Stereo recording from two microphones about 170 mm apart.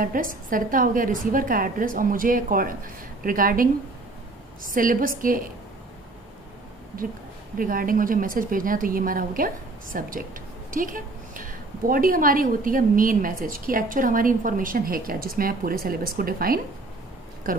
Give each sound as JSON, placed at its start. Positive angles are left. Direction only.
{"t": 0.0, "sound": "a woman's voice", "side_deg": -55}
{"t": 4.6, "sound": "a woman's voice", "side_deg": -55}
{"t": 6.9, "sound": "a woman's voice", "side_deg": -55}